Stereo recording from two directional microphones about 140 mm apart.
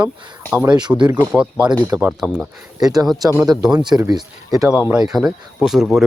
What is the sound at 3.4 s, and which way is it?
Speech, 30° right (ahead or behind).